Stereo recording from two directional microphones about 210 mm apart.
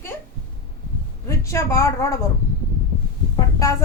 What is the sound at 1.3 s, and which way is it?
Speech, 15° left (ahead or behind).